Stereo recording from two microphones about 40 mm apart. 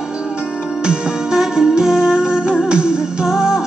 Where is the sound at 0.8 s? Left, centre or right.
Centre.